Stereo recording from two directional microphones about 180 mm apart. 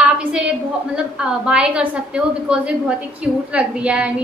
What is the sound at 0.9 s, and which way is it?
A woman's voice, 5° right (ahead or behind).